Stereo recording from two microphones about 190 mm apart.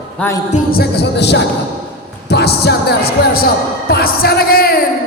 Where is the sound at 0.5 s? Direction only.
55° left (ahead or behind).